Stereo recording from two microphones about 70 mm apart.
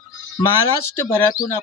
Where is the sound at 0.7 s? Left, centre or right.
Left.